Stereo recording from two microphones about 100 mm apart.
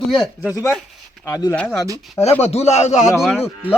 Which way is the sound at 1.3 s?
35° left (ahead or behind).